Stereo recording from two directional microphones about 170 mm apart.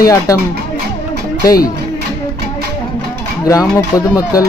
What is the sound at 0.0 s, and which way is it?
Speech, 20° left (ahead or behind).